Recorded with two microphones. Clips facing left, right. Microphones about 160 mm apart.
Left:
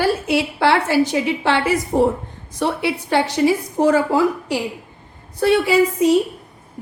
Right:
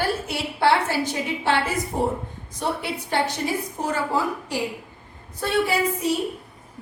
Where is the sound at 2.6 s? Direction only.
90° left.